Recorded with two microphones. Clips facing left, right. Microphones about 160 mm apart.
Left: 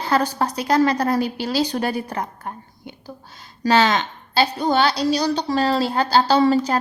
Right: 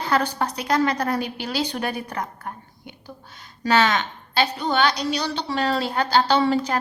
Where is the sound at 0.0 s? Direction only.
30° left (ahead or behind).